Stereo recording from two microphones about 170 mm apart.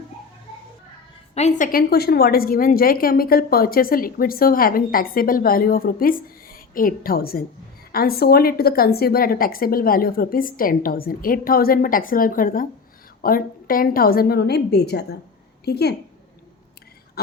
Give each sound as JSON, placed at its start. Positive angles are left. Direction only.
{"t": 1.4, "sound": "a woman's voice", "side_deg": 45}